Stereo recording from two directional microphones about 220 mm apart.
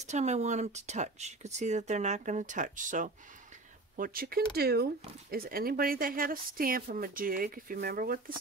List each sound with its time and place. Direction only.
0.0 s speech: 30° right (ahead or behind)